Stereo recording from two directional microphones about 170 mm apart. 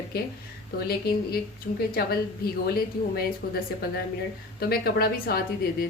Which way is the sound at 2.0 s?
65° left (ahead or behind).